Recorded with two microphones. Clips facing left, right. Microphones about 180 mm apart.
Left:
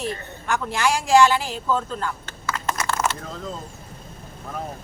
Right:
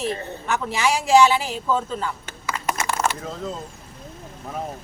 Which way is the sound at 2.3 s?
15° right (ahead or behind).